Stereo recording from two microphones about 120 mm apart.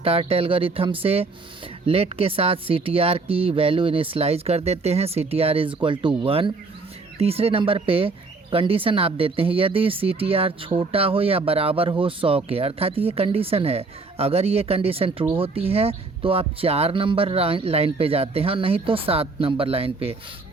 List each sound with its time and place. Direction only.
0.0 s speech: 55° right (ahead or behind)
7.2 s speech: 55° right (ahead or behind)